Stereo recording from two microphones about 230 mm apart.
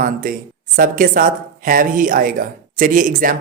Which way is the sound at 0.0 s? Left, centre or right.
Right.